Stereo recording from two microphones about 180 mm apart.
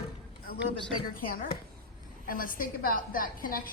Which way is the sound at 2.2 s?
50° left (ahead or behind).